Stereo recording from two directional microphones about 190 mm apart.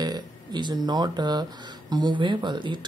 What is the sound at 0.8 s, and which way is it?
Speech, 20° right (ahead or behind).